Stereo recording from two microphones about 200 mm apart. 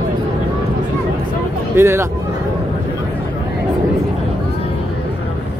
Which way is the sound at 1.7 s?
15° right (ahead or behind).